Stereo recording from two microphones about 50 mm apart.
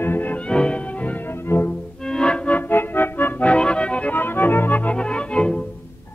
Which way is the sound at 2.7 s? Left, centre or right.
Left.